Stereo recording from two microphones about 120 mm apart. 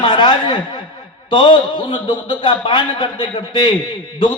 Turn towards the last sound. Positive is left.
turn(degrees=45)  # may be behind; listen again after turning